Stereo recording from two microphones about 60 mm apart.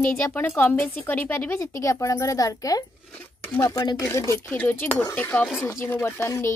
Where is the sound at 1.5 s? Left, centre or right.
Left.